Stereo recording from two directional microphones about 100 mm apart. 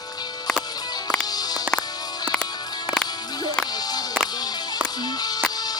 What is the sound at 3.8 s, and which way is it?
Music, 40° left (ahead or behind).